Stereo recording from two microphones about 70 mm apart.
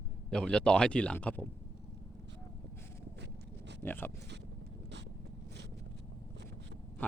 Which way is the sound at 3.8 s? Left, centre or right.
Left.